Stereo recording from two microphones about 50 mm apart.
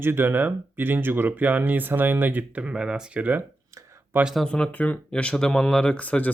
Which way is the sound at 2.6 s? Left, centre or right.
Centre.